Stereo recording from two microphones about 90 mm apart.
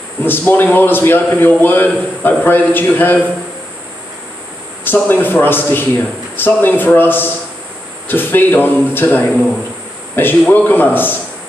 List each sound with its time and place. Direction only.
0.2 s a man's voice: 20° left (ahead or behind)
4.8 s a man's voice: 20° left (ahead or behind)